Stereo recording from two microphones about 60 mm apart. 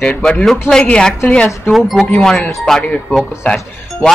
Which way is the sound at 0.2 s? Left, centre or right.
Centre.